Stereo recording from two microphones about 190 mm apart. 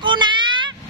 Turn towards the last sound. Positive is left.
turn(degrees=-25)  # may be behind; listen again after turning